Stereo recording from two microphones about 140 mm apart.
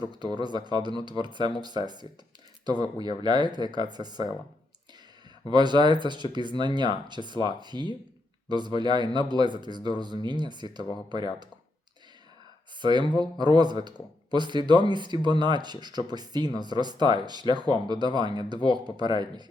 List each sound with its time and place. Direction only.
0.1 s speech: 30° right (ahead or behind)
2.6 s speech: 30° right (ahead or behind)
5.5 s speech: 30° right (ahead or behind)
12.8 s speech: 30° right (ahead or behind)